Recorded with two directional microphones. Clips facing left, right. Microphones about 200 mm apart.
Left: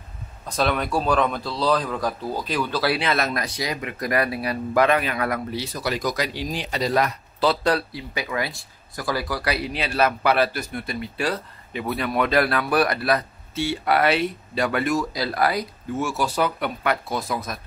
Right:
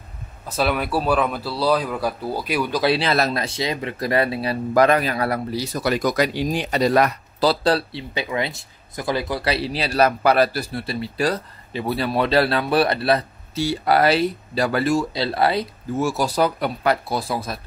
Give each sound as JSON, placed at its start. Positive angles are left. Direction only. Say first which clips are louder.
{"t": 0.5, "sound": "speech", "louder": "right 1 dB", "side_deg": -5}
{"t": 2.9, "sound": "speech", "louder": "right 3 dB", "side_deg": -35}
{"t": 5.8, "sound": "speech", "louder": "right 6 dB", "side_deg": -55}
{"t": 7.3, "sound": "speech", "louder": "right 2 dB", "side_deg": -35}